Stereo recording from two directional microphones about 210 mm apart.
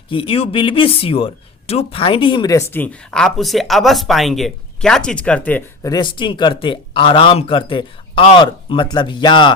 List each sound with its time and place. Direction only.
0.1 s speech: 25° left (ahead or behind); by 5.9 s 10° left (ahead or behind)
5.9 s speech: 20° left (ahead or behind)